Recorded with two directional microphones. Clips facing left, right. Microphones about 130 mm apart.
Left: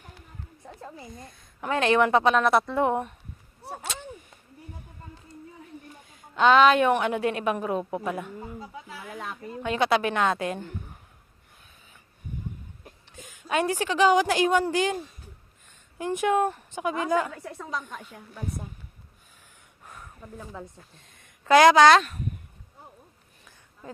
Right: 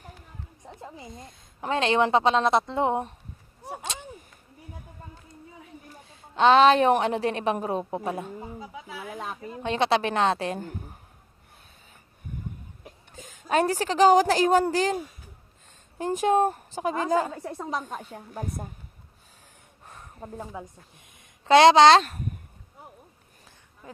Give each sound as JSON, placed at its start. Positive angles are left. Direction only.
{"t": 0.9, "sound": "a woman's voice", "side_deg": -25}
{"t": 3.6, "sound": "a sound", "side_deg": -15}
{"t": 5.9, "sound": "a woman's voice", "side_deg": -30}
{"t": 8.5, "sound": "speech", "side_deg": -10}
{"t": 9.6, "sound": "a woman's voice", "side_deg": -30}
{"t": 13.1, "sound": "a woman's voice", "side_deg": -40}
{"t": 16.0, "sound": "a woman's voice", "side_deg": -40}
{"t": 19.8, "sound": "a sound", "side_deg": -35}
{"t": 20.2, "sound": "a woman's voice", "side_deg": -35}
{"t": 20.5, "sound": "speech", "side_deg": -15}
{"t": 22.0, "sound": "speech", "side_deg": -45}